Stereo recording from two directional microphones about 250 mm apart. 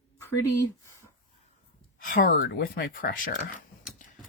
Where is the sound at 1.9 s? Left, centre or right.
Left.